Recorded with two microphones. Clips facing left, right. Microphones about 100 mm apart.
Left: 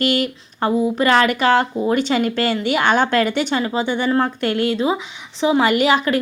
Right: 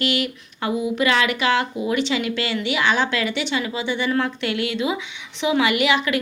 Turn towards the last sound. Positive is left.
turn(degrees=40)  # may be behind; listen again after turning